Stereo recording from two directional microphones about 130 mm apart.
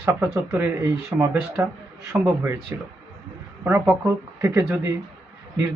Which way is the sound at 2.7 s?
20° right (ahead or behind).